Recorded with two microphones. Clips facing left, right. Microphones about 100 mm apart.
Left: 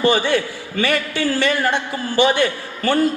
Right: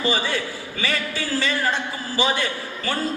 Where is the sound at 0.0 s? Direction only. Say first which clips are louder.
Left 7 dB; 60° left (ahead or behind).